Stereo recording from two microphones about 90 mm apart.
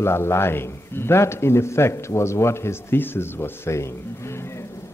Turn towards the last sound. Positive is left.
turn(degrees=30)  # may be behind; listen again after turning